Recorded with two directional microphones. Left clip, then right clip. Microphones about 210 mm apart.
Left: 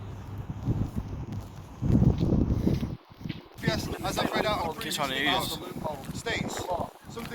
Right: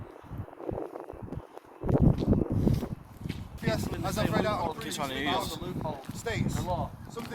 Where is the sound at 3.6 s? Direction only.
45° right (ahead or behind).